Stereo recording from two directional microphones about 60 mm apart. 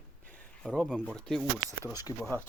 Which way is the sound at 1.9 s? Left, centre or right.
Left.